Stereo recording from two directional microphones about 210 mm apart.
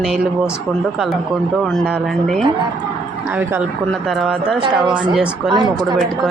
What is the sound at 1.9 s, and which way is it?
Speech, centre (ahead or behind).